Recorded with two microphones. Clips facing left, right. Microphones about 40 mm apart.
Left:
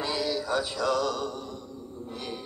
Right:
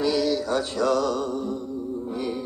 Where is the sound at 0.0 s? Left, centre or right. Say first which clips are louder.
Right 7 dB; centre.